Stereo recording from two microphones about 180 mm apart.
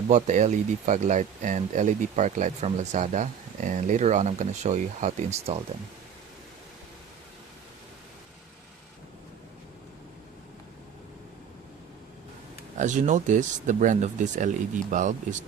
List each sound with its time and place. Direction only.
0.1 s speech: 40° right (ahead or behind)
12.7 s speech: 45° right (ahead or behind)